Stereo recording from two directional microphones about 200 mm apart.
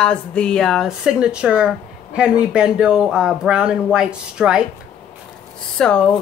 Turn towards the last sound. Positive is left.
turn(degrees=5)  # may be behind; listen again after turning